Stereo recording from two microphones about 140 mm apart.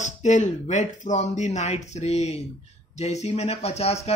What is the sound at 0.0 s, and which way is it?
Speech, 60° left (ahead or behind).